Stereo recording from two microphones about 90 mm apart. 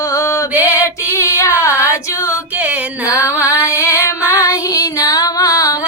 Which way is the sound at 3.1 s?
35° left (ahead or behind).